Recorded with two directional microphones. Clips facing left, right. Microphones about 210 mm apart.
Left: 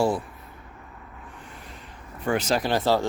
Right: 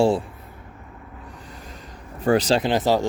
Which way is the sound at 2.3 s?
35° right (ahead or behind).